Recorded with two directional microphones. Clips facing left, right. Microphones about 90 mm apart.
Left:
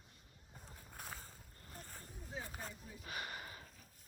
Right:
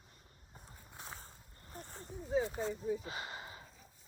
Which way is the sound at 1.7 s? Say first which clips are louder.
Right 7 dB; 25° right (ahead or behind).